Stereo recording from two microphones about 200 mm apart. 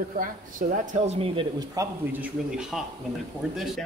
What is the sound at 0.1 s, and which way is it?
A man's voice, 40° right (ahead or behind).